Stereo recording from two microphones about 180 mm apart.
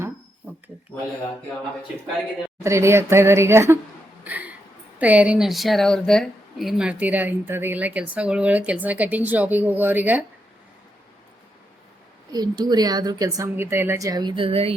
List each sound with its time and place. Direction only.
2.6 s speech: 15° right (ahead or behind)
4.2 s a sound: 10° right (ahead or behind)
4.9 s speech: 10° right (ahead or behind)
12.3 s a woman's voice: 20° right (ahead or behind)